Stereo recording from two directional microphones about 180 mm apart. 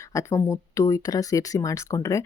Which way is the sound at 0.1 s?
15° left (ahead or behind).